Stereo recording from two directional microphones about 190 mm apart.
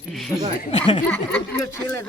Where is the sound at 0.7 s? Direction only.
25° left (ahead or behind).